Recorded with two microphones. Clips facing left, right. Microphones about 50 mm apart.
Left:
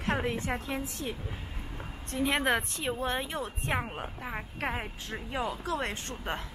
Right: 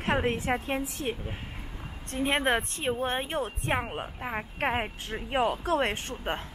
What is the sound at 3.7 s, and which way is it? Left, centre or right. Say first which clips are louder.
Speech: right 2 dB; centre.